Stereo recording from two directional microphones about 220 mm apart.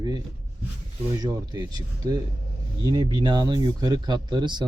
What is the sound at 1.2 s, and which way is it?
Speech, 20° right (ahead or behind).